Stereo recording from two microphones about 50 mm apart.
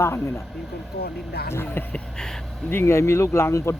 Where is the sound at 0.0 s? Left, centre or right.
Left.